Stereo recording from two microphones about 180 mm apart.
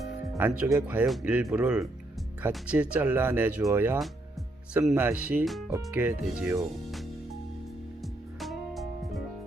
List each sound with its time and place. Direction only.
0.3 s speech: 10° right (ahead or behind)
8.4 s music: centre (ahead or behind)